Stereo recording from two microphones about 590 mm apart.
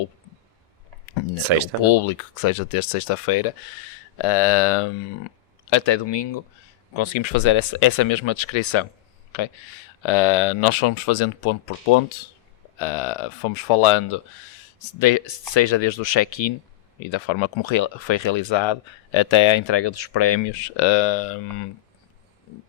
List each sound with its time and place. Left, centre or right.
1.5 s speech: right
1.8 s speech: left
5.7 s speech: left
10.0 s speech: left
12.8 s speech: left